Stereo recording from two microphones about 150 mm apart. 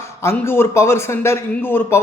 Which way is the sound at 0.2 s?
15° left (ahead or behind).